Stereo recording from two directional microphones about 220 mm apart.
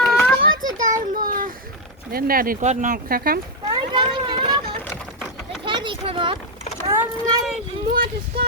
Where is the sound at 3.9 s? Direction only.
20° right (ahead or behind).